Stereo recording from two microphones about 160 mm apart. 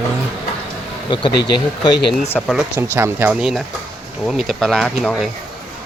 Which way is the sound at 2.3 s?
5° left (ahead or behind).